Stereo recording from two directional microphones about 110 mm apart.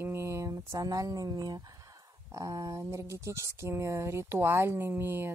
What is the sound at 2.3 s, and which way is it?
Speech, 30° right (ahead or behind).